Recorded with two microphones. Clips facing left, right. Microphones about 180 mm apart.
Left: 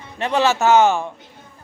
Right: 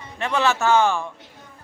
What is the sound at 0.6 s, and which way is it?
Speech, 20° left (ahead or behind).